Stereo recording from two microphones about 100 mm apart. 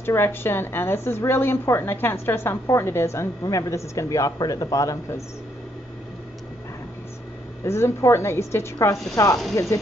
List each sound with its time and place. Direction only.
0.0 s a woman's voice: 25° left (ahead or behind)
7.6 s a woman's voice: 25° left (ahead or behind)